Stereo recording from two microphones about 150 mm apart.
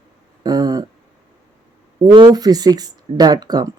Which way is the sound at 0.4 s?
25° right (ahead or behind).